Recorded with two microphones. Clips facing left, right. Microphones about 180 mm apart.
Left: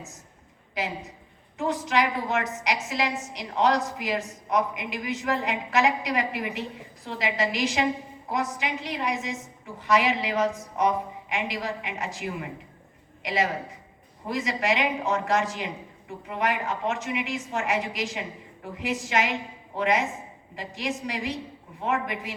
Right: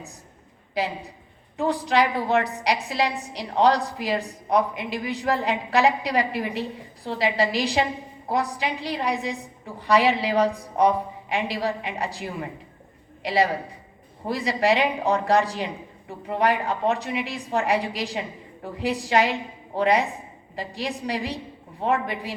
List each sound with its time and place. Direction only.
0.7 s a woman's voice: 35° right (ahead or behind)